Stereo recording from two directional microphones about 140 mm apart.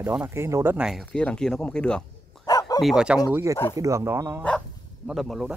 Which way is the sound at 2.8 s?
5° right (ahead or behind).